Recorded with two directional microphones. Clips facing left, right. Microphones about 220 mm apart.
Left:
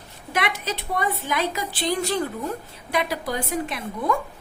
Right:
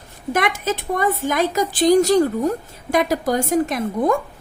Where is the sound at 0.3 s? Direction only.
45° right (ahead or behind).